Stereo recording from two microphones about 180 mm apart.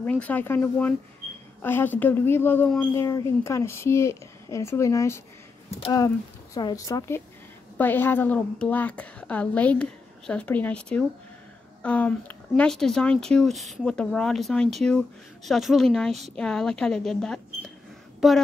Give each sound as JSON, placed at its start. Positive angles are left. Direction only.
{"t": 0.0, "sound": "a woman's voice", "side_deg": 10}